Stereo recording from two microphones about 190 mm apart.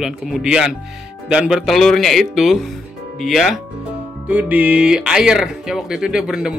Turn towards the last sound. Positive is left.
turn(degrees=-5)  # may be behind; listen again after turning